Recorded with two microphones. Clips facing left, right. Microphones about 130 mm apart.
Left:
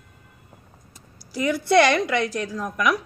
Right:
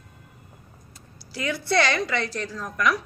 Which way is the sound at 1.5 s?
15° left (ahead or behind).